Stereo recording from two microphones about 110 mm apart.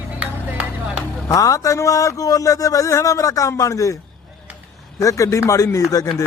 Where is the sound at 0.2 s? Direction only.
10° right (ahead or behind).